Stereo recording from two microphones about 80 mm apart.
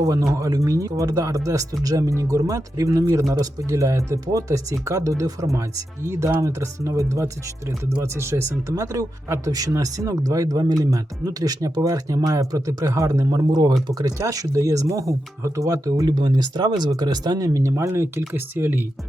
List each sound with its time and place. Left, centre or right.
0.1 s speech: right
14.2 s speech: right
16.0 s speech: right